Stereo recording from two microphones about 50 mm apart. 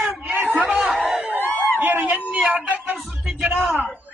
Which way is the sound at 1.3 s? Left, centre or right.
Right.